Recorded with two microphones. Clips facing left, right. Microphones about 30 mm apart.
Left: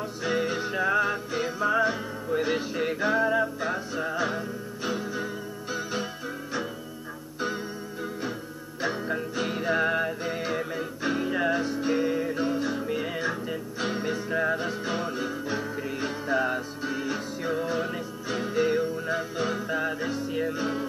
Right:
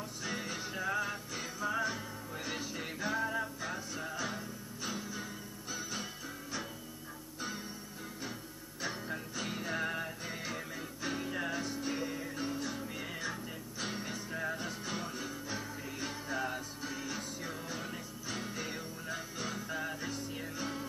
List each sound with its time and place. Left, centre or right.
0.2 s music: left
8.8 s music: left